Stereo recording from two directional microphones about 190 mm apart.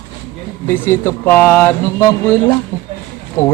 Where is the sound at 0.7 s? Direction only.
10° left (ahead or behind).